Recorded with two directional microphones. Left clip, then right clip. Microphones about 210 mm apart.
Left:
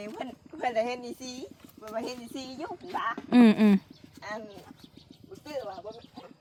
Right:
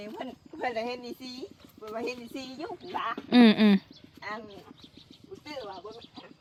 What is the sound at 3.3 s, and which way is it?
Speech, 10° left (ahead or behind).